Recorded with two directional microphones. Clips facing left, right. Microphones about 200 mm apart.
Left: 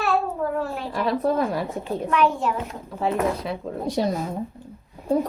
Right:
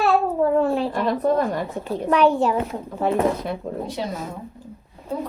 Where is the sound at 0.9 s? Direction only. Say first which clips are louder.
Right 2 dB; centre (ahead or behind).